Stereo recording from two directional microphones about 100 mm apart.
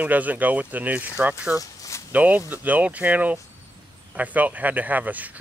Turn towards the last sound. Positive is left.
turn(degrees=-15)  # may be behind; listen again after turning